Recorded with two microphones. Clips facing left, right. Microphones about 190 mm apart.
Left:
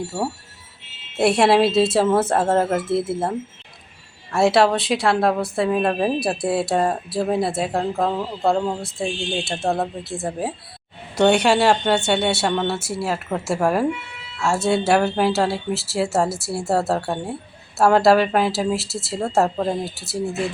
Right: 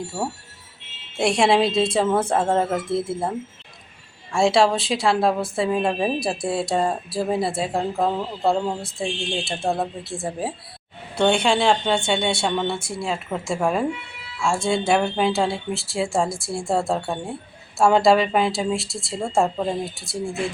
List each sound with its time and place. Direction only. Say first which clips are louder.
1.1 s speech: left 3 dB; 5° left (ahead or behind)
2.8 s speech: left 2 dB; 25° left (ahead or behind)
4.3 s speech: left 1 dB; 5° left (ahead or behind)